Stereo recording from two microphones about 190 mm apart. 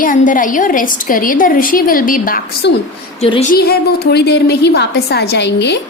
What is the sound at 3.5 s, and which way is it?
A woman's voice, 55° left (ahead or behind).